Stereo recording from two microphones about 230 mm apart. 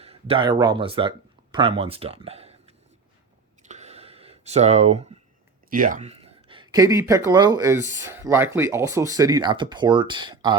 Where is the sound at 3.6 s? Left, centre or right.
Right.